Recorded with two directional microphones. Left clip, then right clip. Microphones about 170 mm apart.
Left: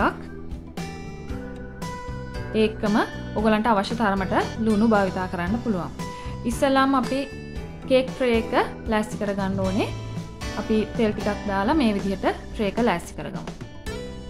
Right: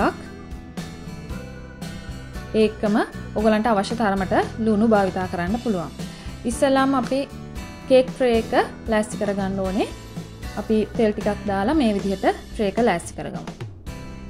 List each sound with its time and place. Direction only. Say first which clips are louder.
2.5 s a woman's voice: right 2 dB; 20° right (ahead or behind)
8.2 s a woman's voice: right 2 dB; 15° right (ahead or behind)